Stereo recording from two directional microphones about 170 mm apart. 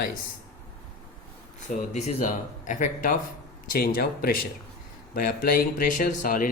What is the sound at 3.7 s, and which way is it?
Speech, 60° left (ahead or behind).